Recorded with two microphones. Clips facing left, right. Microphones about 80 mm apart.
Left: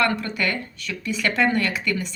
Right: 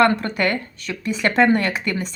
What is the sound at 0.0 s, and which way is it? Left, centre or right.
Speech, right.